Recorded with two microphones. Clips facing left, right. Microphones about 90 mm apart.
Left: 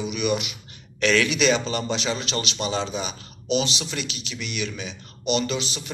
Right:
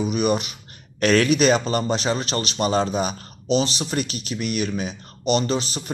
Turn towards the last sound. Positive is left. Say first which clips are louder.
# right 3 dB
turn(degrees=-40)  # may be behind; listen again after turning